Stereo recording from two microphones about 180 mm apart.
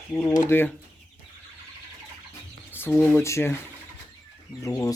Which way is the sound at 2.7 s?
10° left (ahead or behind).